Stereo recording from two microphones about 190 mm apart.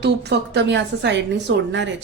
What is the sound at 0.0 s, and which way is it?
A woman's voice, 60° right (ahead or behind).